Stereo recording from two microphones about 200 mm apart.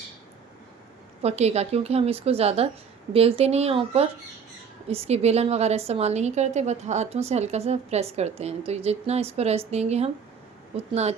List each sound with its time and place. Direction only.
1.2 s a woman's voice: 35° right (ahead or behind)